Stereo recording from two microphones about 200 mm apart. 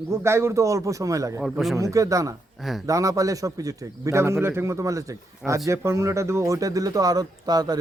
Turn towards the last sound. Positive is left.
turn(degrees=-20)  # may be behind; listen again after turning